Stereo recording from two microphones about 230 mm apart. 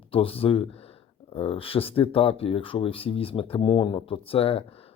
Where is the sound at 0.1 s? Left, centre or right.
Left.